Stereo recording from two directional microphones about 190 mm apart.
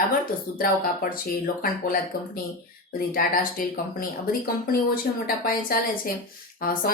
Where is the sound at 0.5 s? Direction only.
50° left (ahead or behind).